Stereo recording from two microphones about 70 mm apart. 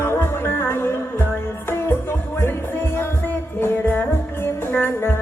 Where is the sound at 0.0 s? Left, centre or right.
Left.